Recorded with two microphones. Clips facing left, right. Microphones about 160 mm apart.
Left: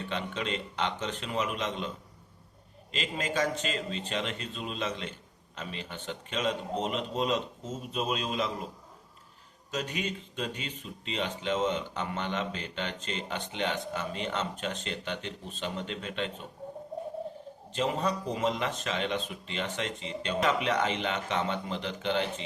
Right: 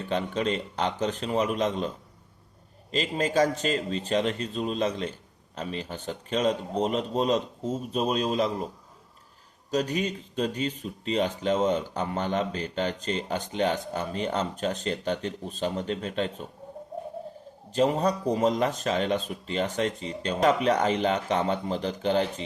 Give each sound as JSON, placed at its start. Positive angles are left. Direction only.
{"t": 0.1, "sound": "speech", "side_deg": -40}
{"t": 2.9, "sound": "speech", "side_deg": -40}
{"t": 9.7, "sound": "speech", "side_deg": -35}
{"t": 17.7, "sound": "speech", "side_deg": -40}